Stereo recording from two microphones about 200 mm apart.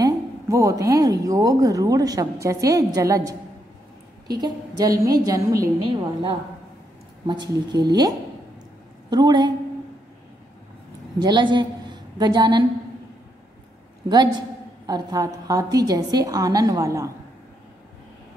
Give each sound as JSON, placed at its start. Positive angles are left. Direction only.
{"t": 0.0, "sound": "a woman's voice", "side_deg": -15}
{"t": 7.2, "sound": "speech", "side_deg": -20}
{"t": 11.1, "sound": "a woman's voice", "side_deg": -20}
{"t": 14.0, "sound": "a woman's voice", "side_deg": -20}